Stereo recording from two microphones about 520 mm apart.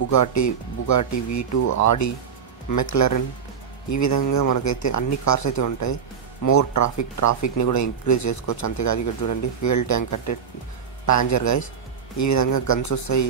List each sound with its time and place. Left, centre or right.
0.1 s speech: left